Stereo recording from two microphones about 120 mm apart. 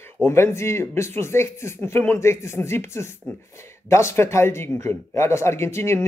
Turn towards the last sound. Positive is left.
turn(degrees=20)  # may be behind; listen again after turning